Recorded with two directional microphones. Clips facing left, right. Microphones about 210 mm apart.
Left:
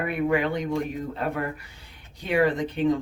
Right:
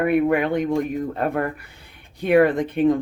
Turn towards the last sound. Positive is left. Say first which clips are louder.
# right 5 dB
turn(degrees=-55)  # may be behind; listen again after turning